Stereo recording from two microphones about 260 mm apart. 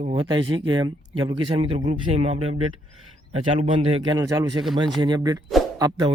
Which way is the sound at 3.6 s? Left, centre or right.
Centre.